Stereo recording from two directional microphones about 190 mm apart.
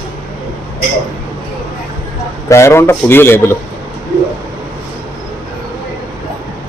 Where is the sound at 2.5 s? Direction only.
15° left (ahead or behind).